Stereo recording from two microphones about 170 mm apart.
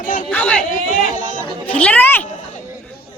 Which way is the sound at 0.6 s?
50° left (ahead or behind).